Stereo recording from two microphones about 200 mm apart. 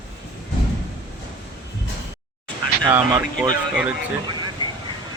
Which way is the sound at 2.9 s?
10° right (ahead or behind).